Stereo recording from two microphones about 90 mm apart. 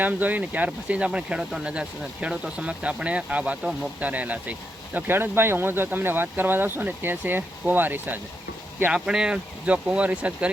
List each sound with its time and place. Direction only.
0.0 s speech: 20° right (ahead or behind)
8.9 s speech: 10° right (ahead or behind)